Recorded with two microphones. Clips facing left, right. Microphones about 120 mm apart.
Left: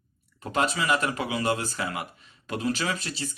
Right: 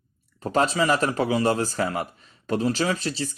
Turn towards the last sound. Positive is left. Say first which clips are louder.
# right 6 dB
turn(degrees=-35)  # may be behind; listen again after turning